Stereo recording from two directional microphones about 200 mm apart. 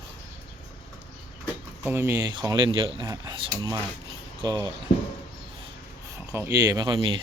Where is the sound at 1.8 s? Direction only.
10° right (ahead or behind).